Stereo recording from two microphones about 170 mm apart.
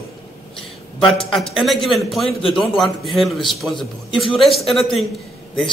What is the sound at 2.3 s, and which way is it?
Speech, 35° left (ahead or behind).